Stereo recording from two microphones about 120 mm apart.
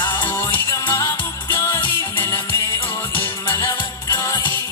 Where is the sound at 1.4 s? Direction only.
20° left (ahead or behind).